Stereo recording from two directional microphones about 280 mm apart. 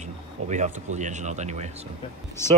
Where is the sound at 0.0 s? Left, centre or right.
Right.